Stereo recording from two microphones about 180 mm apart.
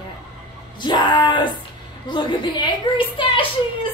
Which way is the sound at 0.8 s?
25° left (ahead or behind).